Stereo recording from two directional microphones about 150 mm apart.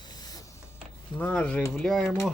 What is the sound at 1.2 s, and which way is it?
Speech, 10° left (ahead or behind).